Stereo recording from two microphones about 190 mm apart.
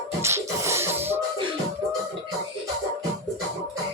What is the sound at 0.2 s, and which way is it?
Music, 15° right (ahead or behind).